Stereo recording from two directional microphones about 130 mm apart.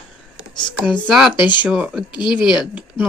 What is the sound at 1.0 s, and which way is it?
Speech, 5° right (ahead or behind).